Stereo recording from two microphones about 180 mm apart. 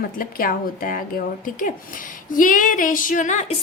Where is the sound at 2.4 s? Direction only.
50° left (ahead or behind).